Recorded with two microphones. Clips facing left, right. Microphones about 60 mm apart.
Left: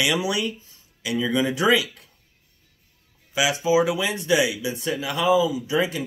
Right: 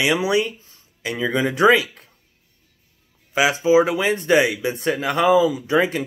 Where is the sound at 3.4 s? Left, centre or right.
Right.